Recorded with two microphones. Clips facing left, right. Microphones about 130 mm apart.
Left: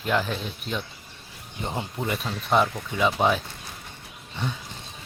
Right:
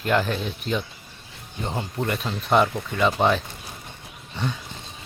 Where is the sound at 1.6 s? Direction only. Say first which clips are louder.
Right 2 dB; 15° left (ahead or behind).